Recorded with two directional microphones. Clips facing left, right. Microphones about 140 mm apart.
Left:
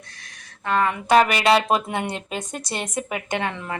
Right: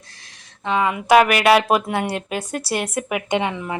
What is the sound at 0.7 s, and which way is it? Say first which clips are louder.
A woman's voice: right 3 dB; 10° right (ahead or behind).